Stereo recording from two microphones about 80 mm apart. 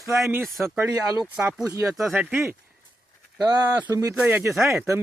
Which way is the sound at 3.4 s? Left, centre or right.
Right.